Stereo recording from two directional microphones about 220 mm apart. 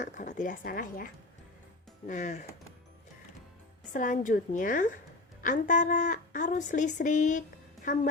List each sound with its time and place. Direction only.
0.0 s speech: 35° left (ahead or behind)
3.9 s speech: 35° left (ahead or behind)